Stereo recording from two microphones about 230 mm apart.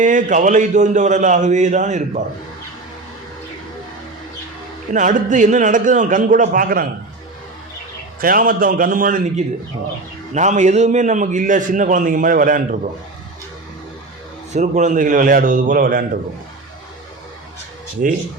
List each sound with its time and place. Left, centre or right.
0.0 s a man's voice: right
4.9 s a man's voice: right
8.2 s a man's voice: right
14.5 s a man's voice: right
18.0 s a man's voice: right